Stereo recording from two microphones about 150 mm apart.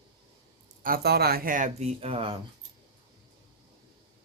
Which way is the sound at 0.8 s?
85° right.